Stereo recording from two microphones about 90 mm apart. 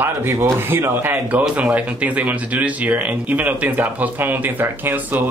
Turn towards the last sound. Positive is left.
turn(degrees=-20)  # may be behind; listen again after turning